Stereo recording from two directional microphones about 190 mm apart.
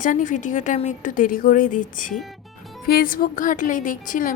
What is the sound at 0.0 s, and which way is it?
A woman's voice, 45° left (ahead or behind).